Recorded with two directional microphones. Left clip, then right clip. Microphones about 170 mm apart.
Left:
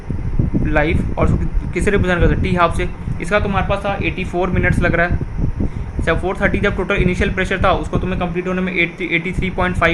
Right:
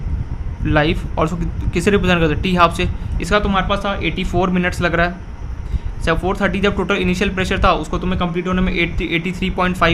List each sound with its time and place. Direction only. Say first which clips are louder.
0.7 s a man's voice: right 2 dB; 50° right (ahead or behind)